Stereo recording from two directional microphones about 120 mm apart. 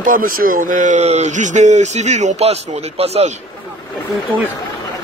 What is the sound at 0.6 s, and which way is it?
Speech, 90° right.